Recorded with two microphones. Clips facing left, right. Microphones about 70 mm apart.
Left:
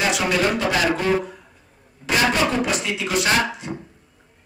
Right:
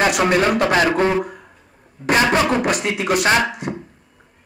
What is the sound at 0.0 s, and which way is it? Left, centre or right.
Speech, right.